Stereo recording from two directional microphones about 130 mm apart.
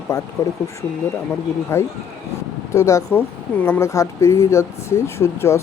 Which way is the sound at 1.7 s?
20° left (ahead or behind).